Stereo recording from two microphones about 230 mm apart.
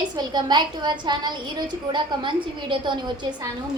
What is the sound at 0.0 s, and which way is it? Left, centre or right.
A woman's voice, centre.